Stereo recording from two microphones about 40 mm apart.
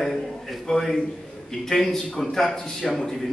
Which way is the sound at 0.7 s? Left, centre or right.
Centre.